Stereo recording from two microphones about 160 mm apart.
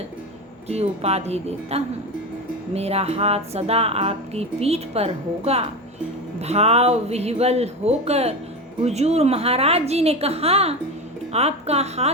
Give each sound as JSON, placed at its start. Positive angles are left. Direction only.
{"t": 0.7, "sound": "speech", "side_deg": -40}